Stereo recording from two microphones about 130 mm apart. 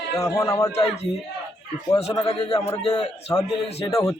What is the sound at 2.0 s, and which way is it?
Speech, 50° left (ahead or behind).